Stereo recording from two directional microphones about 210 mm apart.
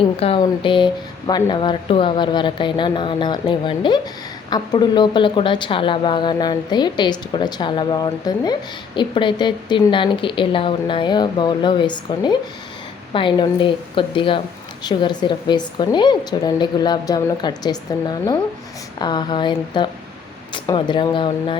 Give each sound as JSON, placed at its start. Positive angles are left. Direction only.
{"t": 0.2, "sound": "speech", "side_deg": 25}